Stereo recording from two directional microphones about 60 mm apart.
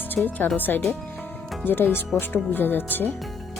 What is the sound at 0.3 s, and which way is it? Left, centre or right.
Speech, left.